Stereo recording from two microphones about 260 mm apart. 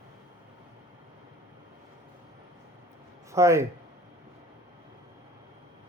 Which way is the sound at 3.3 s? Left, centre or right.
Centre.